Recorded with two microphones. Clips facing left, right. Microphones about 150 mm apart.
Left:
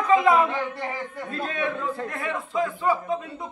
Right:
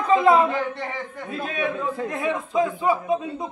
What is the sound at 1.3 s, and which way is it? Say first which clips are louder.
A man's voice: right 2 dB; 10° right (ahead or behind).